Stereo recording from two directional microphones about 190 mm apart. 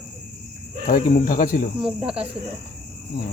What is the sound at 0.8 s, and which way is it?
Speech, 50° left (ahead or behind).